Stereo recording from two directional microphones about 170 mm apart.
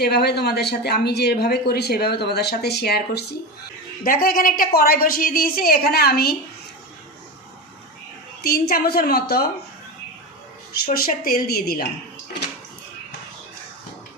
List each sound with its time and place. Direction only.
0.0 s speech: 70° left (ahead or behind)
4.0 s a woman's voice: 55° left (ahead or behind)
8.4 s a woman's voice: 65° left (ahead or behind)
10.7 s a woman's voice: 60° left (ahead or behind)